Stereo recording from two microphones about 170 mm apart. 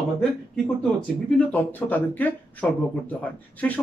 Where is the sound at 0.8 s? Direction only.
5° left (ahead or behind).